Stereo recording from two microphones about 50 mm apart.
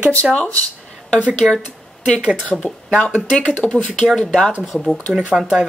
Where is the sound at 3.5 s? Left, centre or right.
Left.